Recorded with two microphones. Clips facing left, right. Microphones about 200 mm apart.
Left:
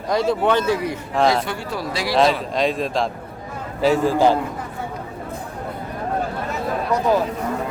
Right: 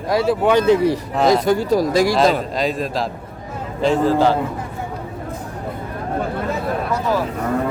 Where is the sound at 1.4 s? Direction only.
40° right (ahead or behind).